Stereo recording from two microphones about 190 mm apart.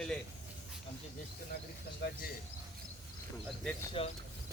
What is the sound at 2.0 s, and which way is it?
Speech, 60° left (ahead or behind).